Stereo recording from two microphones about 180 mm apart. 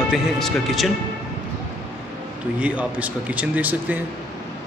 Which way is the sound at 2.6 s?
5° right (ahead or behind).